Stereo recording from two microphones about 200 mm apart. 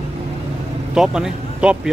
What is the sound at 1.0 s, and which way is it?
Speech, 5° right (ahead or behind).